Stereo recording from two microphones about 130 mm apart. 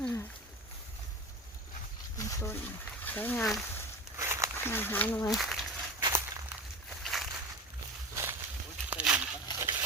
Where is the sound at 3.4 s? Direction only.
Centre (ahead or behind).